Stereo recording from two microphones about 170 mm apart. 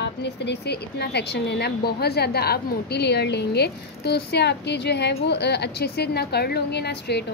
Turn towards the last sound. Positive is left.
turn(degrees=75)  # may be behind; listen again after turning